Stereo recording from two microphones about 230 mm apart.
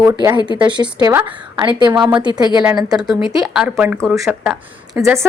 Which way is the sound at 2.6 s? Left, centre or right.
Centre.